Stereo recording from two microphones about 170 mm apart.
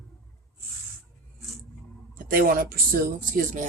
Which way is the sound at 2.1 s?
55° right (ahead or behind).